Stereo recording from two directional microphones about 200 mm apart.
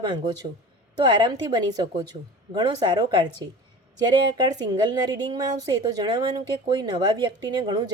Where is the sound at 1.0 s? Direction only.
20° right (ahead or behind).